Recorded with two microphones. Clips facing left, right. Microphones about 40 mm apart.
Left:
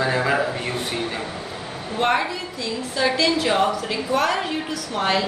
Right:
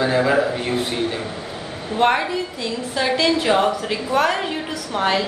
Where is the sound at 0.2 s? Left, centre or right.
Centre.